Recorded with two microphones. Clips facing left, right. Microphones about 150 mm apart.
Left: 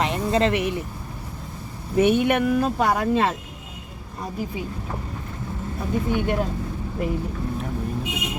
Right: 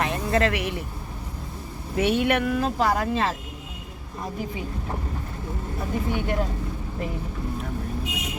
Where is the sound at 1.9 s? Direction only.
20° left (ahead or behind).